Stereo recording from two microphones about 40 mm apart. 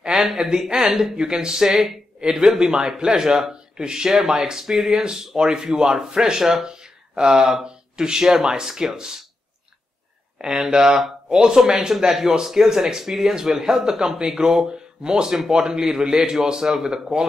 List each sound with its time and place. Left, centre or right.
0.0 s a sound: centre
0.4 s speech: centre
10.4 s speech: centre